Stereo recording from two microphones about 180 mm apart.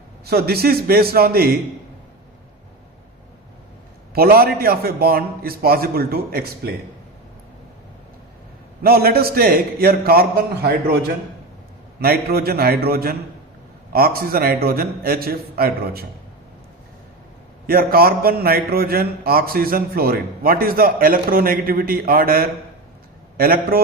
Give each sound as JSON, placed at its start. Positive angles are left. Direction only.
{"t": 0.3, "sound": "a man's voice", "side_deg": -60}
{"t": 4.1, "sound": "a man's voice", "side_deg": -60}
{"t": 8.8, "sound": "a man's voice", "side_deg": -55}
{"t": 11.9, "sound": "a man's voice", "side_deg": -60}
{"t": 17.7, "sound": "a man's voice", "side_deg": -55}